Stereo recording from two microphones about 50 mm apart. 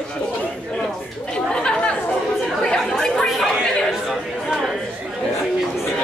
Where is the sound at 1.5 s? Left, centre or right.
Centre.